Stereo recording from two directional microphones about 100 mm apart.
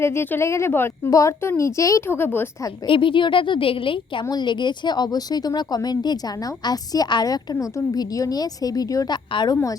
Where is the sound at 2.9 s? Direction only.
60° left (ahead or behind).